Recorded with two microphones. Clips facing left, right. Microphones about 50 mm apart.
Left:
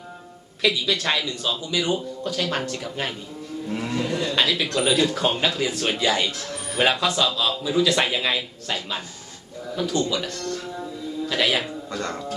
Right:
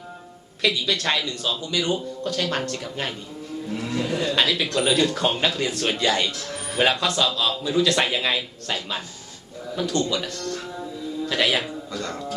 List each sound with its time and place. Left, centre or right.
0.6 s a man's voice: centre
3.7 s speech: centre
3.9 s a sound: centre
4.3 s a man's voice: centre
11.3 s speech: centre
11.9 s speech: left